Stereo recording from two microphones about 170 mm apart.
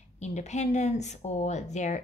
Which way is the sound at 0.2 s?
40° left (ahead or behind).